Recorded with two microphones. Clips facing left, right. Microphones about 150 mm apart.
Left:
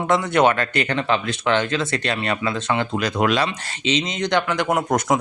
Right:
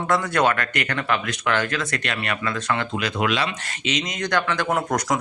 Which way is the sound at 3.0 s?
40° left (ahead or behind).